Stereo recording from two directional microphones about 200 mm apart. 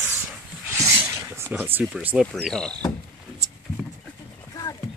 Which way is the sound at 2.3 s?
5° left (ahead or behind).